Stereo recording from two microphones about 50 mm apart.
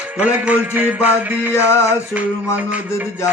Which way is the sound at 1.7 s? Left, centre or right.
Left.